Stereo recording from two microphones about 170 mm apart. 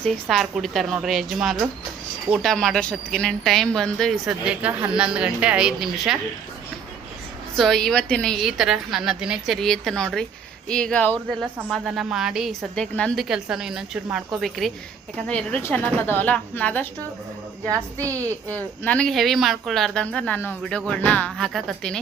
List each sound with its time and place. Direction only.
0.0 s speech: centre (ahead or behind)
7.5 s a woman's voice: centre (ahead or behind)
11.7 s a woman's voice: centre (ahead or behind)
17.7 s a woman's voice: 20° right (ahead or behind)
18.4 s speech: 10° left (ahead or behind)